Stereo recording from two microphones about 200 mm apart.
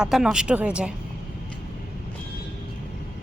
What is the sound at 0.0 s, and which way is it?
Speech, centre (ahead or behind).